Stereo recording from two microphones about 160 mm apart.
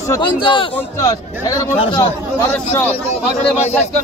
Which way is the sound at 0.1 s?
30° left (ahead or behind).